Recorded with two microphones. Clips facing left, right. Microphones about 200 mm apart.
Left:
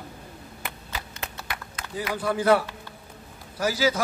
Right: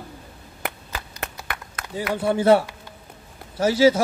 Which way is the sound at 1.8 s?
55° right (ahead or behind).